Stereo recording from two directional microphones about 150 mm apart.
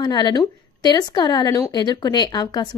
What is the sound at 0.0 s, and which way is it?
Speech, 30° left (ahead or behind).